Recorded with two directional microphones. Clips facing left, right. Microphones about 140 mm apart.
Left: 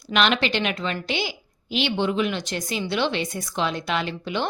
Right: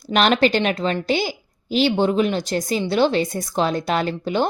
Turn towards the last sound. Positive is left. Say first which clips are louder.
# right 6 dB
turn(degrees=-40)  # may be behind; listen again after turning